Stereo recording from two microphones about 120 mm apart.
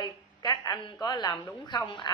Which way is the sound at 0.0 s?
35° left (ahead or behind).